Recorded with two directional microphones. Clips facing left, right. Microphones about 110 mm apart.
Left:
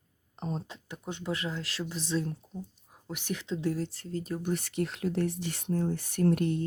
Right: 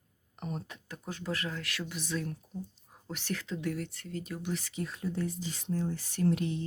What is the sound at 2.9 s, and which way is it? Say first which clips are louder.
Whispering: left 1 dB; 15° left (ahead or behind).